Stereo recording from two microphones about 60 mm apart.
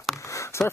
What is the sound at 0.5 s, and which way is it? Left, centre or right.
Speech, left.